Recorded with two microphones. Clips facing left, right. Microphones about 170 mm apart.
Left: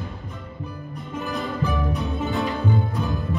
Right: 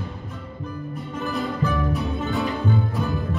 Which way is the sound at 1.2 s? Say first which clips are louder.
Right 2 dB; centre (ahead or behind).